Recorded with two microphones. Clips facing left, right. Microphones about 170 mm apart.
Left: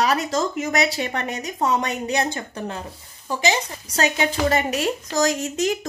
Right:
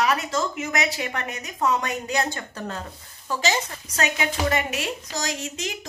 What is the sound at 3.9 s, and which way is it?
A woman's voice, 30° left (ahead or behind).